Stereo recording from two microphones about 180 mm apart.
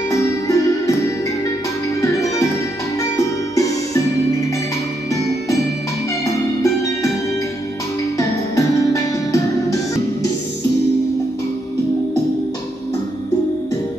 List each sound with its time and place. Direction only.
0.1 s music: 15° left (ahead or behind)
6.2 s music: 15° left (ahead or behind)
8.2 s music: 15° left (ahead or behind)